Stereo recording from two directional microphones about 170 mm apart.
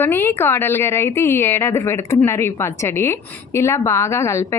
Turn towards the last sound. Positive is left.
turn(degrees=15)  # may be behind; listen again after turning